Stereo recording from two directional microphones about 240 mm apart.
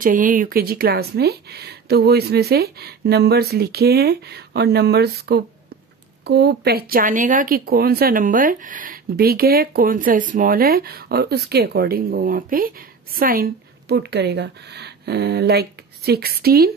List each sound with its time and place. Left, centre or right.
0.0 s speech: right